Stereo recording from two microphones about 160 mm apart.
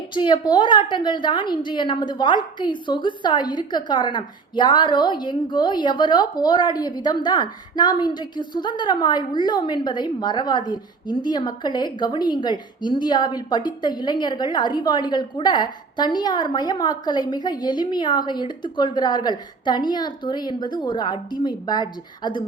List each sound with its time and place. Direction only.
0.1 s a woman's voice: 30° left (ahead or behind)